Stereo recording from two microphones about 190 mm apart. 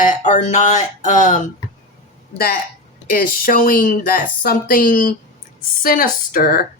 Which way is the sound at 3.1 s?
50° left (ahead or behind).